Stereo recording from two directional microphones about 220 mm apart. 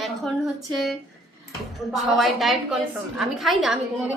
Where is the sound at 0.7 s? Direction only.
Centre (ahead or behind).